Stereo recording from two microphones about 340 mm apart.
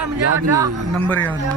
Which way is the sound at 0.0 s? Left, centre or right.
Right.